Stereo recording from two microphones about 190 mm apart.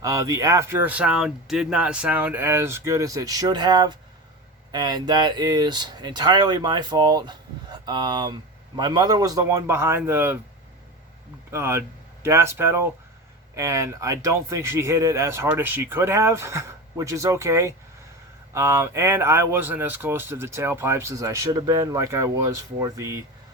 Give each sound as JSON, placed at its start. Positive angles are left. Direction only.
{"t": 0.0, "sound": "speech", "side_deg": -15}
{"t": 11.5, "sound": "speech", "side_deg": -10}